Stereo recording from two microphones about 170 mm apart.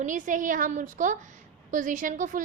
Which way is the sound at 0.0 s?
50° right (ahead or behind).